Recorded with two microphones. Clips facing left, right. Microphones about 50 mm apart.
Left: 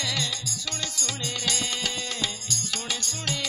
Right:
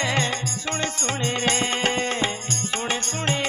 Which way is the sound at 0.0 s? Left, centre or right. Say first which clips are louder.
Right 7 dB; right.